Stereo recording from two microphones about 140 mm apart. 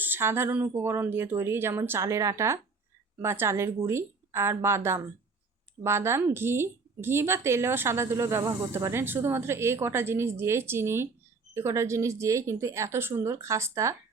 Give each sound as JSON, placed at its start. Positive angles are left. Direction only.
{"t": 0.0, "sound": "speech", "side_deg": -15}